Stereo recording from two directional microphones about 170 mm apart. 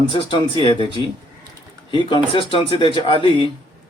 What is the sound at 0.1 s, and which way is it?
Speech, 25° left (ahead or behind).